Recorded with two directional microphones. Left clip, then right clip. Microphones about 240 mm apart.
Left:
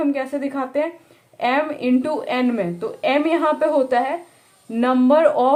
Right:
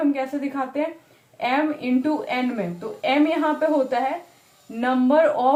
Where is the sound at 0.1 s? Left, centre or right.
Left.